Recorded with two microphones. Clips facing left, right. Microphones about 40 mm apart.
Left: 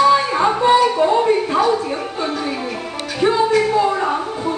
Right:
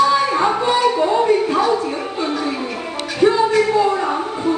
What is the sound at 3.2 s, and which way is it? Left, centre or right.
Music, centre.